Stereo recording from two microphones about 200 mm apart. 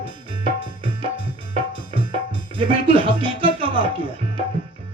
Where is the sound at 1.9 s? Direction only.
25° right (ahead or behind).